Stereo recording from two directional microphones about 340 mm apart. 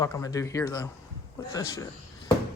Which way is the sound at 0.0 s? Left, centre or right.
Centre.